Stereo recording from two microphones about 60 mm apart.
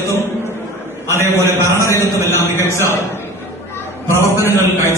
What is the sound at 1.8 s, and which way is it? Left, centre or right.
Speech, left.